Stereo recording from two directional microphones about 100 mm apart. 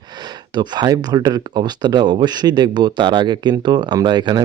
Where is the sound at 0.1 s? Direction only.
45° right (ahead or behind).